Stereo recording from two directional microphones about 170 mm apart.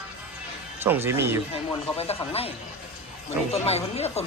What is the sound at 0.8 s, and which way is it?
Speech, 15° right (ahead or behind).